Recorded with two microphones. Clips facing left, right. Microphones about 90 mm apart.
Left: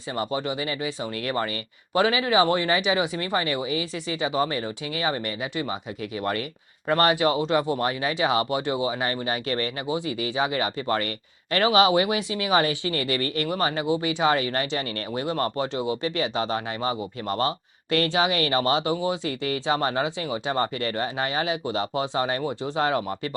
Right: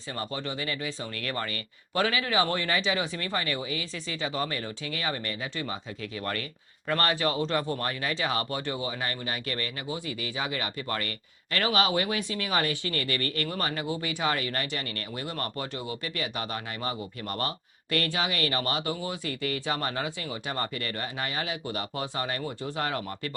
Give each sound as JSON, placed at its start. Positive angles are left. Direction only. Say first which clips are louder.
{"t": 0.2, "sound": "speech", "louder": "left 7 dB", "side_deg": 15}